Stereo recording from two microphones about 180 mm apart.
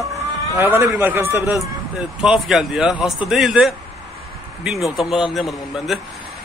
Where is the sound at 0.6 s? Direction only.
10° right (ahead or behind).